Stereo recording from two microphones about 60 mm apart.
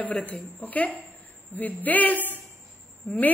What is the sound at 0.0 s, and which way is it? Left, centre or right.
A woman's voice, centre.